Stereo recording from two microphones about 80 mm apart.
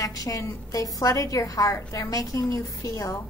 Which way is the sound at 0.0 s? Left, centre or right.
Left.